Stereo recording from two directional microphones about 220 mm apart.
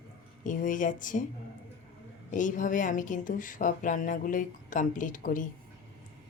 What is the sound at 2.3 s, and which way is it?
A woman's voice, 35° left (ahead or behind).